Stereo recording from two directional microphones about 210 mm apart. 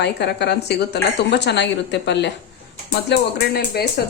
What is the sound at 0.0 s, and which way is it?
A woman's voice, 55° left (ahead or behind).